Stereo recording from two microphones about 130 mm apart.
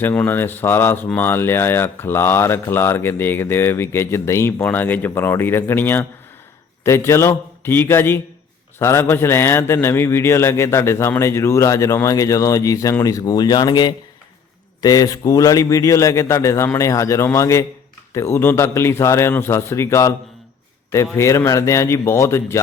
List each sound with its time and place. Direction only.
0.0 s a man's voice: 15° left (ahead or behind)
21.2 s a man's voice: 20° left (ahead or behind)